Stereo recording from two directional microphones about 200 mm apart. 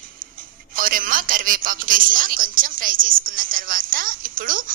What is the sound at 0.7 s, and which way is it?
A woman's voice, 45° right (ahead or behind).